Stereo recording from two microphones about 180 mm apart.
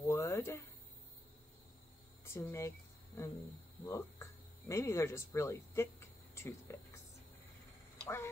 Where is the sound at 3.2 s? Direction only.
15° left (ahead or behind).